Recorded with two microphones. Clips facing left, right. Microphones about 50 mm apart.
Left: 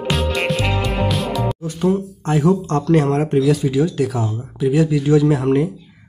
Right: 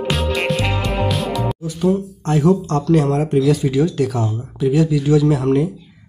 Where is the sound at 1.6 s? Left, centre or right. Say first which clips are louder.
Right 1 dB; left.